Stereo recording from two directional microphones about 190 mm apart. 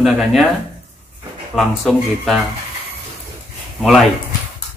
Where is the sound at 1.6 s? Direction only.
Centre (ahead or behind).